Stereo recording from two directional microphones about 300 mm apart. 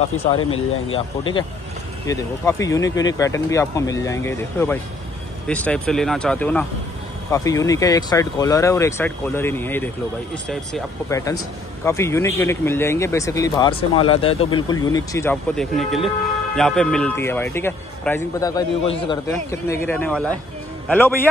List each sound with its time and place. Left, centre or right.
0.4 s speech: left
0.9 s a man's voice: centre